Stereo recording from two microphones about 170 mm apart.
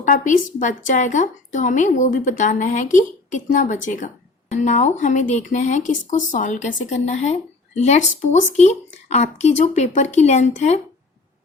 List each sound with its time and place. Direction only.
0.0 s a woman's voice: 50° left (ahead or behind)